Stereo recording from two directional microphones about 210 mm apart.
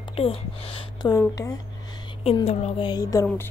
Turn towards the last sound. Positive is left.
turn(degrees=15)  # may be behind; listen again after turning